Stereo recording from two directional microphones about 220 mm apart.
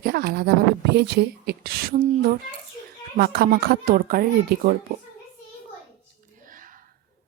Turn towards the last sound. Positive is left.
turn(degrees=-40)  # may be behind; listen again after turning